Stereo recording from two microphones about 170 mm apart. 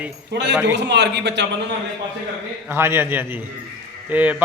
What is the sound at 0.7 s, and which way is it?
Speech, 90° right.